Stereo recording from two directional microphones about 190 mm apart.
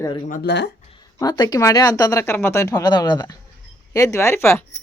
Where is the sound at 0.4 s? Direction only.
65° left (ahead or behind).